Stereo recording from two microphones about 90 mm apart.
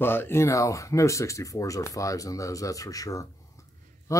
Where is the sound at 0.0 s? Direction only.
25° left (ahead or behind).